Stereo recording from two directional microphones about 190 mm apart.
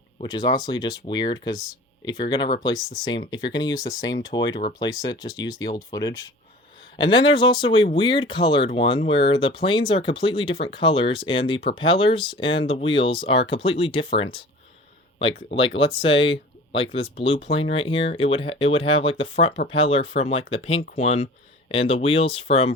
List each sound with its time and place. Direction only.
0.2 s speech: 20° left (ahead or behind)
15.5 s speech: 30° left (ahead or behind)